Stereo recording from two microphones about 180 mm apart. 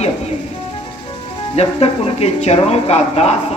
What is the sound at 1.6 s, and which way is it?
Speech, 35° left (ahead or behind).